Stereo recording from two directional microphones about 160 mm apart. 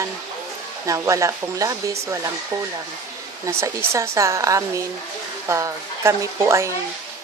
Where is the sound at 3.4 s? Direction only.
15° right (ahead or behind).